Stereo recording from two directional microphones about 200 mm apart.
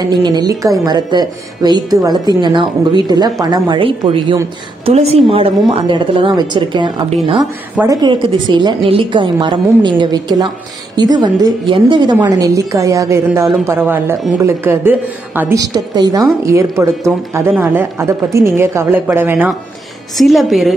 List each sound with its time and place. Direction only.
0.1 s a woman's voice: 20° right (ahead or behind)
20.2 s a woman's voice: centre (ahead or behind)